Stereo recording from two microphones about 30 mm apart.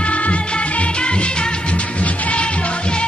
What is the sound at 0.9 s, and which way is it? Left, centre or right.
Music, left.